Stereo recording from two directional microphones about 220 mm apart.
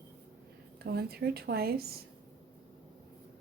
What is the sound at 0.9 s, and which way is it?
Speech, 45° right (ahead or behind).